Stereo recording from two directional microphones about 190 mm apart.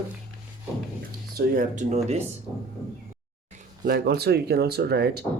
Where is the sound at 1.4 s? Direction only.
45° right (ahead or behind).